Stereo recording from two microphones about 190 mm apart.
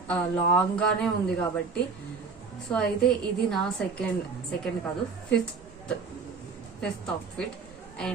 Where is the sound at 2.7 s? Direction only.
10° left (ahead or behind).